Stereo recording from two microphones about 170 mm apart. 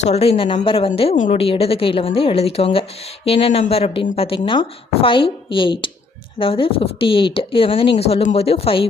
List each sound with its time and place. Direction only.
0.0 s speech: 35° left (ahead or behind)
1.1 s a woman's voice: 50° left (ahead or behind)
1.4 s speech: 35° left (ahead or behind)